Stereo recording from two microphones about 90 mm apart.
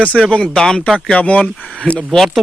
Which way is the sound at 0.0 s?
15° left (ahead or behind).